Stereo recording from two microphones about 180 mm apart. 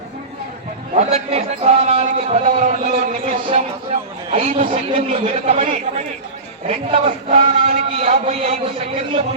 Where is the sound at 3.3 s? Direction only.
30° right (ahead or behind).